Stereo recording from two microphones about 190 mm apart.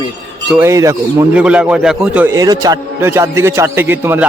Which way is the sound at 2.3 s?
20° right (ahead or behind).